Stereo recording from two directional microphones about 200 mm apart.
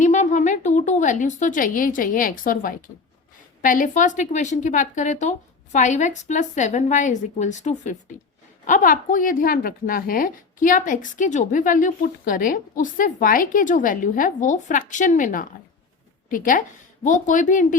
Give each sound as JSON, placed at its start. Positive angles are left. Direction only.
{"t": 0.0, "sound": "a woman's voice", "side_deg": 35}